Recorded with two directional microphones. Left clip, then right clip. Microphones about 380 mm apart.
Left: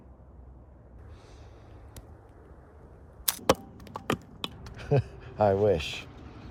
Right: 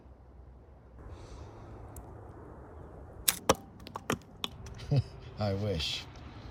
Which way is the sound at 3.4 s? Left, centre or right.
Centre.